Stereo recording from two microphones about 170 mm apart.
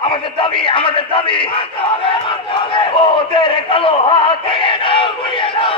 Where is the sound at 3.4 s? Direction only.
30° left (ahead or behind).